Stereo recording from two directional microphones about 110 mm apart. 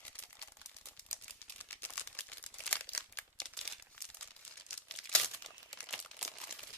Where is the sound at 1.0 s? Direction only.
20° left (ahead or behind).